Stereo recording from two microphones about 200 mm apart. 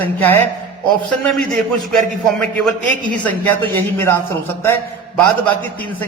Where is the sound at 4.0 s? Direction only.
10° left (ahead or behind).